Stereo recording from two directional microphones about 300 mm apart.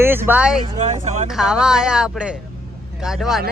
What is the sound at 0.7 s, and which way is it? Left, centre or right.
Speech, right.